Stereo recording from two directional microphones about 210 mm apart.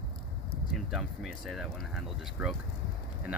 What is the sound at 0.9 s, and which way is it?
Speech, centre (ahead or behind).